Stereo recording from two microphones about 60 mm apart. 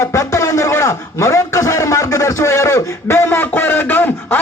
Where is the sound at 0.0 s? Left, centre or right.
Left.